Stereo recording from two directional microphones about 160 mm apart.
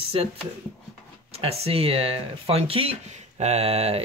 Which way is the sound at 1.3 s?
40° right (ahead or behind).